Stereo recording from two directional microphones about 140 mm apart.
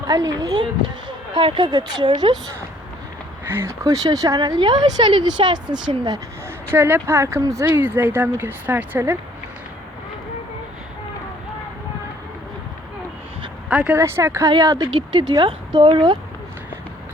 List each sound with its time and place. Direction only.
0.1 s speech: 25° right (ahead or behind)
3.4 s speech: 15° right (ahead or behind); by 6.1 s 35° right (ahead or behind)
6.7 s speech: 15° right (ahead or behind)
13.7 s speech: 10° right (ahead or behind); by 16.1 s 35° right (ahead or behind)